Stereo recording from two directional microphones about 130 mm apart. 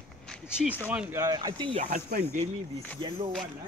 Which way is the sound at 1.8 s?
75° right (ahead or behind).